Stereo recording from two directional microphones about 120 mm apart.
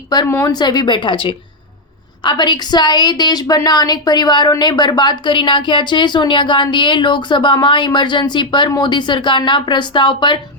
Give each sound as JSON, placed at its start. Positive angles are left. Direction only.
{"t": 0.3, "sound": "a woman's voice", "side_deg": 25}
{"t": 0.6, "sound": "a woman's voice", "side_deg": 35}